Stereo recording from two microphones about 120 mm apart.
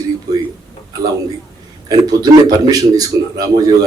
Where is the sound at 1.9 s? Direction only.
30° right (ahead or behind).